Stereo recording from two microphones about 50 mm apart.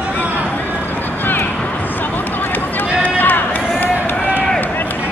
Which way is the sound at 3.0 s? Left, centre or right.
Left.